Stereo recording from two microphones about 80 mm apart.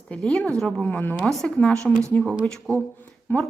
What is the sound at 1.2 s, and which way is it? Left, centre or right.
A woman's voice, centre.